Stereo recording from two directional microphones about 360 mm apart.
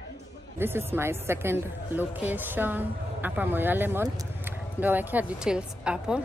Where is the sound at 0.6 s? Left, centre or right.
Centre.